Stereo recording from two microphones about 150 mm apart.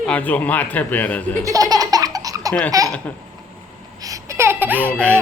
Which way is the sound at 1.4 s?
25° right (ahead or behind).